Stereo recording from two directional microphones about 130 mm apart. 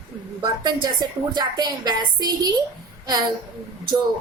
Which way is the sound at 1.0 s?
30° right (ahead or behind).